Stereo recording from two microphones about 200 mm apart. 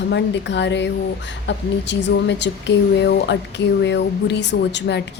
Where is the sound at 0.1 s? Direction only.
60° left (ahead or behind).